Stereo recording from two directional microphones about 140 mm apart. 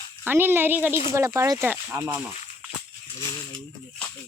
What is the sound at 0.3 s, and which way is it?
Speech, 15° right (ahead or behind).